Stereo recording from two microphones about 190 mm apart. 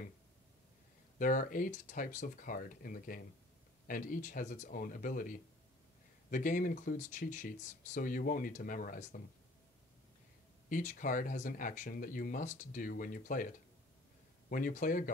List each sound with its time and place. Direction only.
1.1 s speech: 45° left (ahead or behind)
10.7 s speech: 45° left (ahead or behind)
14.5 s speech: 45° left (ahead or behind)